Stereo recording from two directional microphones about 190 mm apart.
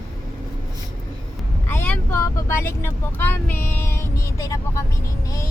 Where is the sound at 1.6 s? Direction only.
10° left (ahead or behind).